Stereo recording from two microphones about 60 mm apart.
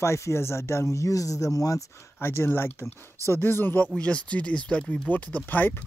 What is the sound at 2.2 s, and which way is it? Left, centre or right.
Speech, left.